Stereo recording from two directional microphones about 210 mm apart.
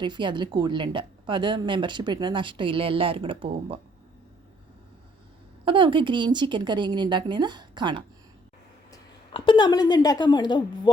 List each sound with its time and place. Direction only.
0.0 s a woman's voice: 20° right (ahead or behind)
5.6 s a woman's voice: 25° right (ahead or behind)
9.5 s a woman's voice: 20° left (ahead or behind)